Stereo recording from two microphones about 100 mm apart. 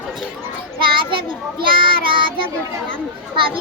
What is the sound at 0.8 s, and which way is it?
Children playing, 55° right (ahead or behind).